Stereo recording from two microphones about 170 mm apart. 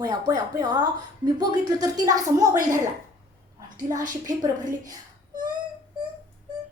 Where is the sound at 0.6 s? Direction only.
25° right (ahead or behind).